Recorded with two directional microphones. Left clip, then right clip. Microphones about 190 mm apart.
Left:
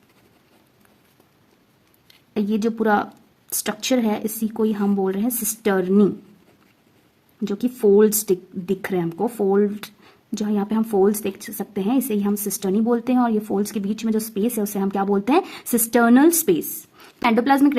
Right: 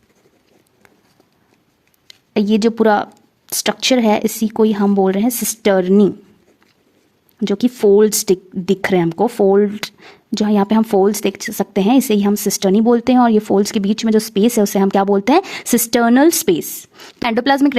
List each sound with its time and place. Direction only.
2.0 s speech: 40° right (ahead or behind)
7.3 s a woman's voice: 40° right (ahead or behind)